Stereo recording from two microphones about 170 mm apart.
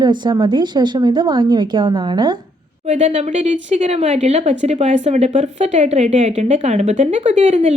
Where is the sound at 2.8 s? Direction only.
40° right (ahead or behind).